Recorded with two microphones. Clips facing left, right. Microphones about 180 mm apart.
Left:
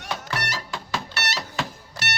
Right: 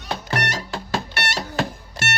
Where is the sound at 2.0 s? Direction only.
50° right (ahead or behind).